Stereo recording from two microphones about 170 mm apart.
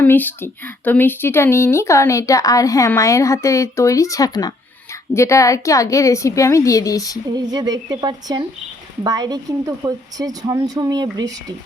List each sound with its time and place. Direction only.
0.0 s a woman's voice: 10° left (ahead or behind)
7.3 s speech: 25° right (ahead or behind)